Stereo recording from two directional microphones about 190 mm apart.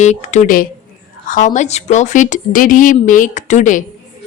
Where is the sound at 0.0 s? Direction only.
35° left (ahead or behind).